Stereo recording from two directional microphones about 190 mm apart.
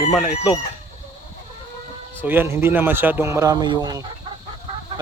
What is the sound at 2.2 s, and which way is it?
A man's voice, 10° right (ahead or behind).